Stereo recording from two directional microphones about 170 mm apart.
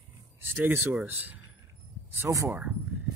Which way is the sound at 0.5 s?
15° right (ahead or behind).